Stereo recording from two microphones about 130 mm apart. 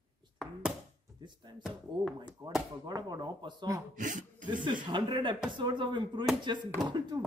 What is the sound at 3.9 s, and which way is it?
Speech, 85° right.